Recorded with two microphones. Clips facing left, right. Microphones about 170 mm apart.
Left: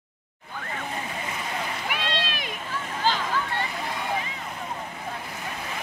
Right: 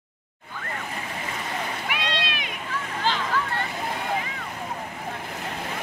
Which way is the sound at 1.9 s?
40° left (ahead or behind).